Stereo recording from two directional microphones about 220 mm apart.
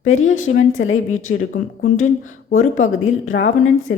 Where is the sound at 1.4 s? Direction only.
35° left (ahead or behind).